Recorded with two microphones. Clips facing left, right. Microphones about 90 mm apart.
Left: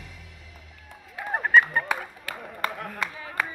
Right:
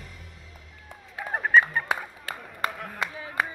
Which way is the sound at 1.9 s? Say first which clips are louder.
Even; 25° right (ahead or behind).